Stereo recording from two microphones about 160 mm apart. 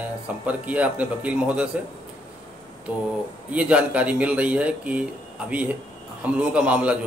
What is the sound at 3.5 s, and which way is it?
A man's voice, 10° right (ahead or behind).